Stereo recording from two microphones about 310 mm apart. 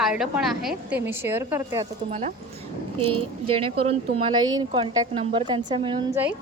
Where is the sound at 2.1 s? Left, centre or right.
Right.